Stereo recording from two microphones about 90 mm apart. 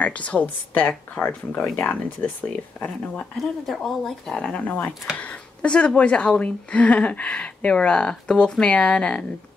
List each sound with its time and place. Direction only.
0.0 s speech: 15° left (ahead or behind)
2.8 s speech: 5° left (ahead or behind)